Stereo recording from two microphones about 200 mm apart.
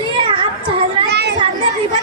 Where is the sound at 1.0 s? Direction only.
55° right (ahead or behind).